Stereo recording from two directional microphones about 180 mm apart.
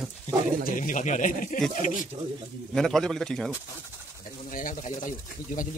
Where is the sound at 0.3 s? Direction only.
40° left (ahead or behind).